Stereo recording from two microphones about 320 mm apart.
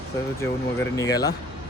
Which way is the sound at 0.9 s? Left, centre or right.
Centre.